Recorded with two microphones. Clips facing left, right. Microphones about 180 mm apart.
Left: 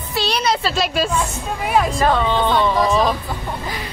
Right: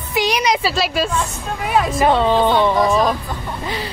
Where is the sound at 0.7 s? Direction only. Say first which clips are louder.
Even; centre (ahead or behind).